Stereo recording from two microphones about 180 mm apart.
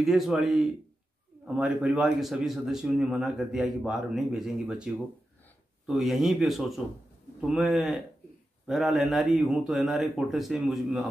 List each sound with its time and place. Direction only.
0.0 s a man's voice: centre (ahead or behind)